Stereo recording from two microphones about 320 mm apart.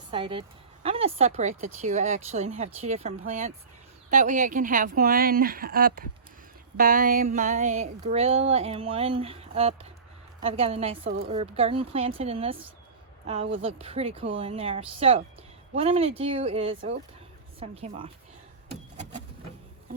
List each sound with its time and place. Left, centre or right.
0.1 s a woman's voice: centre